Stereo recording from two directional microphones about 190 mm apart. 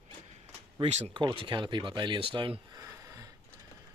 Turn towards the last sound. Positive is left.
turn(degrees=-15)  # may be behind; listen again after turning